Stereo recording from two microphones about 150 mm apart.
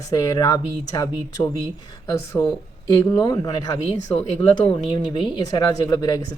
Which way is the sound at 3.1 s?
25° left (ahead or behind).